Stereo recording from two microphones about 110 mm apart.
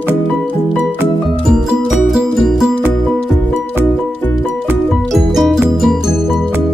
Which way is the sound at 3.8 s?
20° left (ahead or behind).